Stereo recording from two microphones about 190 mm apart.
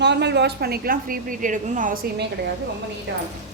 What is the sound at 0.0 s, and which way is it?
A woman's voice, 65° right (ahead or behind).